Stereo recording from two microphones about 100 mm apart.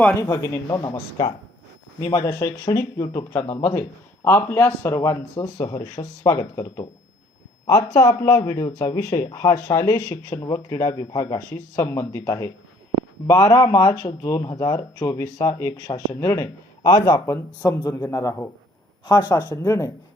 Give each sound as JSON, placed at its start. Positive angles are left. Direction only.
{"t": 0.2, "sound": "speech", "side_deg": 30}
{"t": 2.1, "sound": "a man's voice", "side_deg": 30}
{"t": 16.8, "sound": "speech", "side_deg": 45}
{"t": 17.2, "sound": "a man's voice", "side_deg": 25}
{"t": 19.0, "sound": "speech", "side_deg": 45}
{"t": 19.3, "sound": "speech", "side_deg": 35}